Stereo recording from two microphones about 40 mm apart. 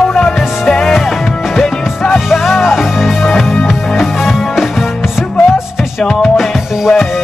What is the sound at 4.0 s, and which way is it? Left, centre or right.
Music, centre.